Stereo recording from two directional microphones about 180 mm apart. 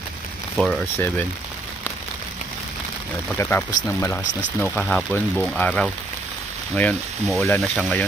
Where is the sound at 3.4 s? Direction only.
10° left (ahead or behind).